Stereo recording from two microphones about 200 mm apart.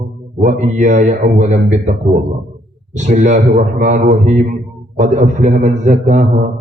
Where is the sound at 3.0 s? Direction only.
35° right (ahead or behind).